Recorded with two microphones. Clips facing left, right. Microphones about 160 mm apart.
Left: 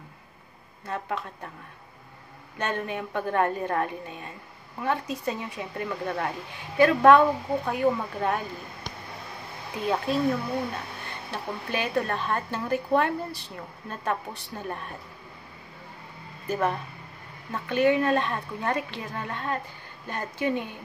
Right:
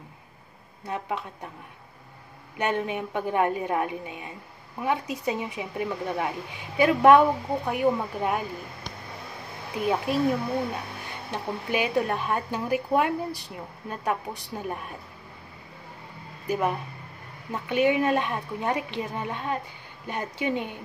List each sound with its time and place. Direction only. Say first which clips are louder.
0.8 s speech: right 1 dB; 15° right (ahead or behind)
2.6 s speech: right 3 dB; 15° right (ahead or behind)
9.8 s speech: right 1 dB; 15° right (ahead or behind)
11.2 s speech: right 3 dB; 15° right (ahead or behind)
16.4 s speech: right 1 dB; 10° right (ahead or behind)